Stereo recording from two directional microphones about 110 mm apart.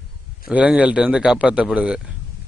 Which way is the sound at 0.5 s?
10° right (ahead or behind).